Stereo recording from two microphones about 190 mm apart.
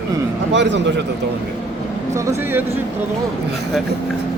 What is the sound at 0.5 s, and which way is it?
Speech, 70° right (ahead or behind).